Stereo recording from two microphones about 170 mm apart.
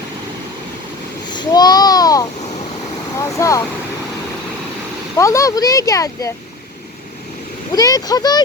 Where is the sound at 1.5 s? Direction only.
25° left (ahead or behind).